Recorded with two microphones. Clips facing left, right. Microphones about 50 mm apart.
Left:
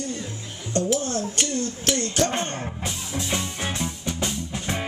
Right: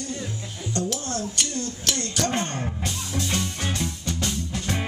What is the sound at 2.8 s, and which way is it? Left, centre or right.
Music, centre.